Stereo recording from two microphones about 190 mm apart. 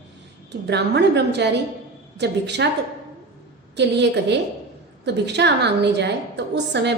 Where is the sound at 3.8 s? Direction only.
65° right (ahead or behind).